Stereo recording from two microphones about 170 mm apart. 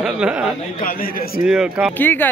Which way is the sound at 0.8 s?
55° left (ahead or behind).